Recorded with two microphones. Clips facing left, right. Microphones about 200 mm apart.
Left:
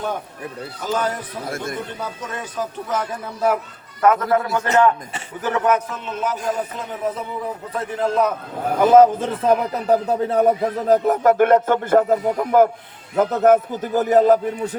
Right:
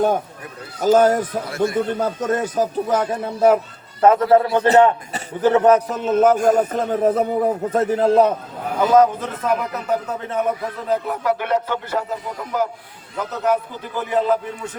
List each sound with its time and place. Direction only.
0.8 s speech: 45° right (ahead or behind)
1.5 s a man's voice: 50° left (ahead or behind)
2.0 s speech: 45° right (ahead or behind)
2.9 s a man's voice: 25° right (ahead or behind)
8.9 s a man's voice: 30° left (ahead or behind)